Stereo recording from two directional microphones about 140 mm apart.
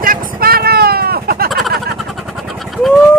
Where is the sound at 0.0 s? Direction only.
90° right.